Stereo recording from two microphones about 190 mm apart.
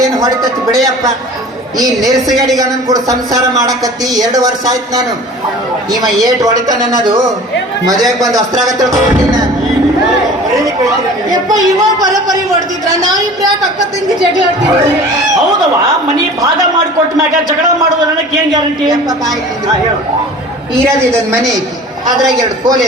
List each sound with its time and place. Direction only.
0.0 s speech: 20° right (ahead or behind)
11.3 s speech: 20° right (ahead or behind)
18.5 s speech: 20° right (ahead or behind)
22.3 s speech: 20° right (ahead or behind)